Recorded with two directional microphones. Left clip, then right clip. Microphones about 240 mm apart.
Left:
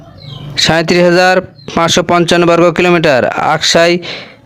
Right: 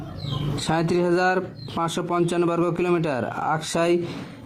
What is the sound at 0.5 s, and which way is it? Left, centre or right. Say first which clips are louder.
Speech: left 14 dB; left.